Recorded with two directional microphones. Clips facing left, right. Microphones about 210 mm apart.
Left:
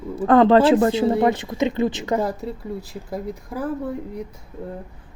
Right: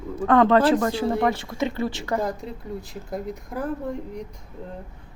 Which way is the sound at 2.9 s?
Centre (ahead or behind).